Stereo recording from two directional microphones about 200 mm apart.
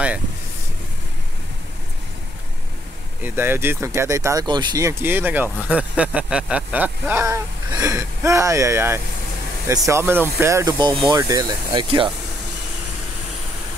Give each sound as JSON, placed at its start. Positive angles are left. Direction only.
{"t": 3.2, "sound": "speech", "side_deg": -10}